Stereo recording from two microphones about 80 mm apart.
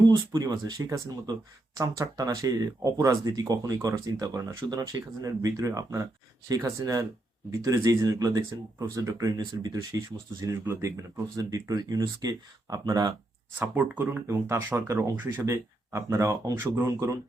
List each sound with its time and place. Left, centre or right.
0.3 s speech: right
10.4 s speech: right
11.3 s speech: right
13.6 s speech: centre
14.3 s speech: right
15.4 s speech: right
16.6 s speech: right